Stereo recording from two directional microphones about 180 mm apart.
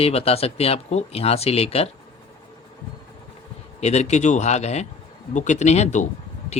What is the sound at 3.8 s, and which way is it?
Speech, 40° left (ahead or behind).